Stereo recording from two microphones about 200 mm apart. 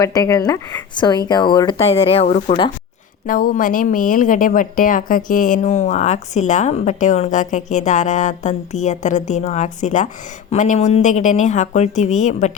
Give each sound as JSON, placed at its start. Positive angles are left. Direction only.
{"t": 0.0, "sound": "speech", "side_deg": 15}
{"t": 3.2, "sound": "a woman's voice", "side_deg": 45}